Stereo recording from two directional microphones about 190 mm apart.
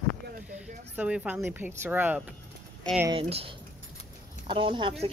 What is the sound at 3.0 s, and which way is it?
A woman's voice, 30° right (ahead or behind).